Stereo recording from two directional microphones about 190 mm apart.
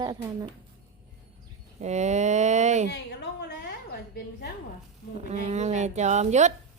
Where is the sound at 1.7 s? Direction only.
35° right (ahead or behind).